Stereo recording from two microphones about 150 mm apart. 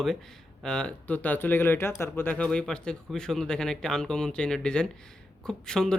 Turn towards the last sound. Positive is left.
turn(degrees=5)  # may be behind; listen again after turning